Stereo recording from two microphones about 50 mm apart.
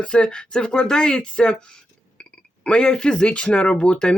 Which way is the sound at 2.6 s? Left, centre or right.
Left.